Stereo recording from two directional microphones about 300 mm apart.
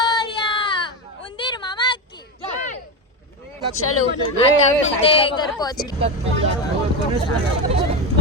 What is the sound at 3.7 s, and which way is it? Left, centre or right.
Speech, left.